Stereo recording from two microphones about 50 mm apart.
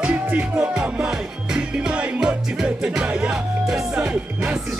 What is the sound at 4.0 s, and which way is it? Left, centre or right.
Music, right.